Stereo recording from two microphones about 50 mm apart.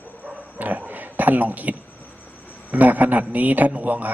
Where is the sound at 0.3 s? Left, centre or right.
Right.